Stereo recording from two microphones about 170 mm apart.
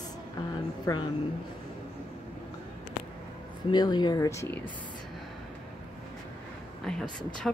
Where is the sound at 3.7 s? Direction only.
25° left (ahead or behind).